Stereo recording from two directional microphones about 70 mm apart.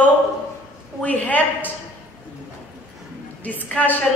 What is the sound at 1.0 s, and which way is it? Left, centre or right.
Speech, left.